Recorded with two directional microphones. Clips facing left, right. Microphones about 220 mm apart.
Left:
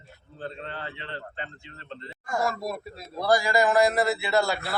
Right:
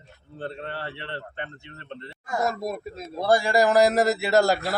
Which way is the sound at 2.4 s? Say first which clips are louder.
Right 4 dB; 20° right (ahead or behind).